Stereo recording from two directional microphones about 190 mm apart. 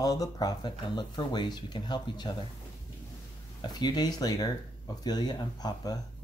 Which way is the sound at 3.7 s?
20° left (ahead or behind).